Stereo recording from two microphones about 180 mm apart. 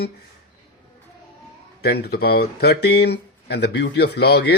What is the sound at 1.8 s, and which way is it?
Speech, 60° left (ahead or behind).